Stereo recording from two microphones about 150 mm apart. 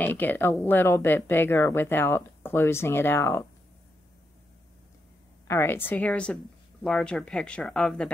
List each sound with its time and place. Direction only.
0.0 s speech: 10° left (ahead or behind)
5.5 s speech: 15° left (ahead or behind)